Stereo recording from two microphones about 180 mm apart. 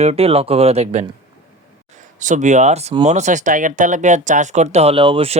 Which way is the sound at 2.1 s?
45° right (ahead or behind).